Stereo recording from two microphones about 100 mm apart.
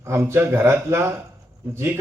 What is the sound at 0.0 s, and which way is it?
A man's voice, 30° right (ahead or behind).